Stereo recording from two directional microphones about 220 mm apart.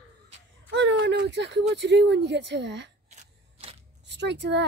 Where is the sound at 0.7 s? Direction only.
55° right (ahead or behind).